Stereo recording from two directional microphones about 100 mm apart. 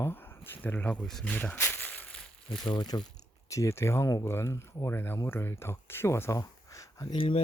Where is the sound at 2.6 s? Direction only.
45° left (ahead or behind).